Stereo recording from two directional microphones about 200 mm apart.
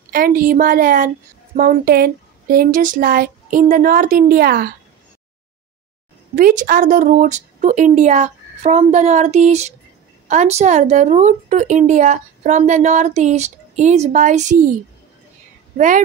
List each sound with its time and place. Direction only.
0.1 s a woman's voice: 45° right (ahead or behind)
6.3 s a woman's voice: 40° right (ahead or behind)